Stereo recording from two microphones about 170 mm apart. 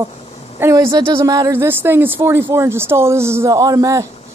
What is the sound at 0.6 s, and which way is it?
Speech, 15° right (ahead or behind).